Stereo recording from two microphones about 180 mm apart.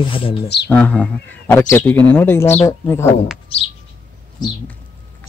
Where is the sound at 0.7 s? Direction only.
10° left (ahead or behind).